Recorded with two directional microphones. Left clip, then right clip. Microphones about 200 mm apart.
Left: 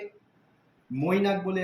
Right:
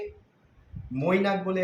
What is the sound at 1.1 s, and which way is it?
Speech, 20° right (ahead or behind).